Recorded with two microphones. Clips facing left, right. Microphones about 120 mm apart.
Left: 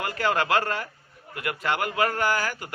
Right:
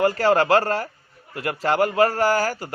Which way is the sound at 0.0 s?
35° right (ahead or behind).